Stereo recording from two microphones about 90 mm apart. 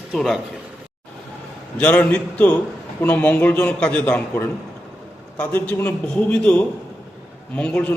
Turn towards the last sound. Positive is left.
turn(degrees=15)  # may be behind; listen again after turning